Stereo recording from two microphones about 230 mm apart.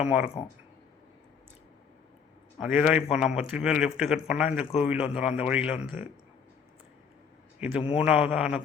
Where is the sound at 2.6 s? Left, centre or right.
Centre.